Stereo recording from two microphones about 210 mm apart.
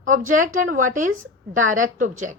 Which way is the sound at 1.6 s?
40° right (ahead or behind).